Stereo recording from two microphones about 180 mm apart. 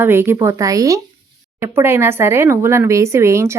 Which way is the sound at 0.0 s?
15° right (ahead or behind).